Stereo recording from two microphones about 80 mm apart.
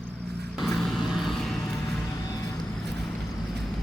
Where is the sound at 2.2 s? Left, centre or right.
Left.